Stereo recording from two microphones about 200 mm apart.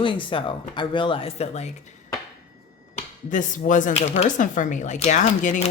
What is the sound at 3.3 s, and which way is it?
Speech, 40° left (ahead or behind).